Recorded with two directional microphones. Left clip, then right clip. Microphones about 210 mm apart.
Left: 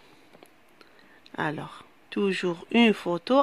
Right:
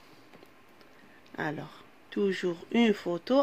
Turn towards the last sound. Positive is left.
turn(degrees=25)  # may be behind; listen again after turning